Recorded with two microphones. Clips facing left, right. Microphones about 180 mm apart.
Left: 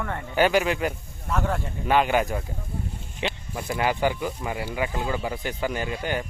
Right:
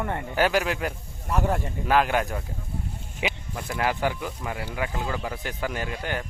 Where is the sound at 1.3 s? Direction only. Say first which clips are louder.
Right 1 dB; 15° right (ahead or behind).